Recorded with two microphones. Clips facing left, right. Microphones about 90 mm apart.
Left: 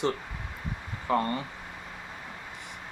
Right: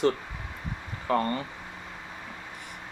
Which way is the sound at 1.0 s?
20° left (ahead or behind).